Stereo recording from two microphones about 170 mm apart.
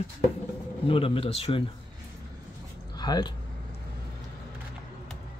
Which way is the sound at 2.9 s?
25° left (ahead or behind).